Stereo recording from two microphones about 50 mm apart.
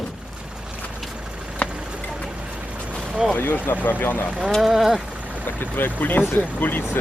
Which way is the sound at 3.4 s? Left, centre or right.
Left.